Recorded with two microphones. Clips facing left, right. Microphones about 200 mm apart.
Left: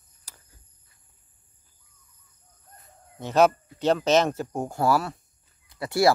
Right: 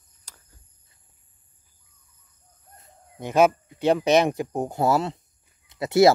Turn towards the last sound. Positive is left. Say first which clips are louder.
# right 5 dB
turn(degrees=-20)  # may be behind; listen again after turning